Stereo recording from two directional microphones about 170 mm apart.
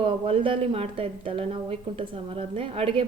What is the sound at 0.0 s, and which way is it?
A woman's voice, 30° right (ahead or behind).